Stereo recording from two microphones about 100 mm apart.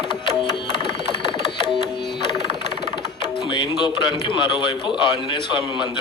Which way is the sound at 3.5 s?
50° left (ahead or behind).